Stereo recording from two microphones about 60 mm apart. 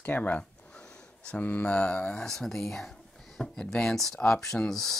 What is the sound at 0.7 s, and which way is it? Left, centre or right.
Speech, centre.